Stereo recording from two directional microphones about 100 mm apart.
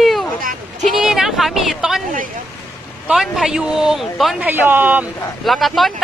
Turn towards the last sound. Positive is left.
turn(degrees=0)  # may be behind; listen again after turning